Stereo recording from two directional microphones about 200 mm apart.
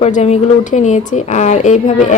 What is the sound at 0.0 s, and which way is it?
A woman's voice, 35° left (ahead or behind).